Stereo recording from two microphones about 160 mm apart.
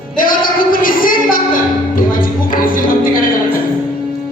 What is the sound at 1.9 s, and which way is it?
Music, 60° left (ahead or behind).